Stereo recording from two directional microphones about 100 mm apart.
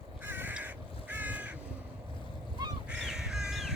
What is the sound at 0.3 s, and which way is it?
Crow, 20° right (ahead or behind).